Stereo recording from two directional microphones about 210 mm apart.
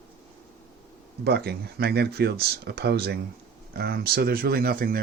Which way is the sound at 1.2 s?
50° right (ahead or behind).